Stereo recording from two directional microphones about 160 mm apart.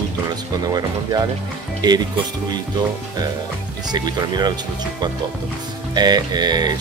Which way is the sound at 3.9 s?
25° right (ahead or behind).